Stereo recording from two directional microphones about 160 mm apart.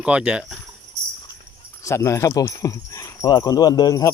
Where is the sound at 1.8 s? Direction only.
20° left (ahead or behind).